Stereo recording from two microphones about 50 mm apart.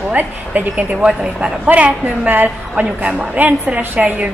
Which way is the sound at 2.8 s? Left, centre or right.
Right.